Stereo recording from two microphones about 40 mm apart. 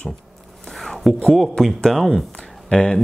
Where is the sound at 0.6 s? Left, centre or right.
Centre.